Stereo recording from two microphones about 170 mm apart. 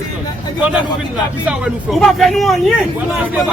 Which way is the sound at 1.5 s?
5° right (ahead or behind).